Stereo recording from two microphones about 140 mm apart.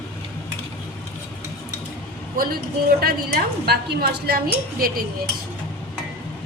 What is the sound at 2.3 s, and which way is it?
A woman's voice, 90° right.